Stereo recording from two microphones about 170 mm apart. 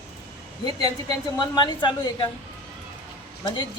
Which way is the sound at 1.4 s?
25° left (ahead or behind).